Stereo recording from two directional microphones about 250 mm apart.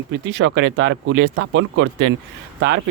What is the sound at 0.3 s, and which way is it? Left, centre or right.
Speech, right.